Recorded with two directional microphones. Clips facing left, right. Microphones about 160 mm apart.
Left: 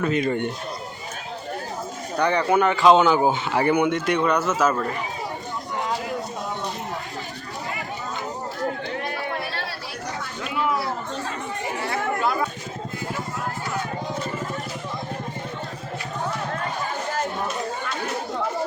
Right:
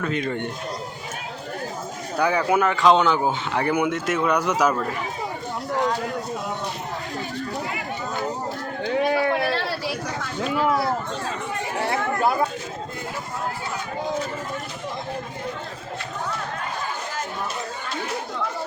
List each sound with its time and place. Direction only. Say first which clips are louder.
0.0 s a man's voice: left 3 dB; 10° left (ahead or behind)
2.1 s speech: left 1 dB; 5° right (ahead or behind)
9.0 s a sound: right 8 dB; 90° right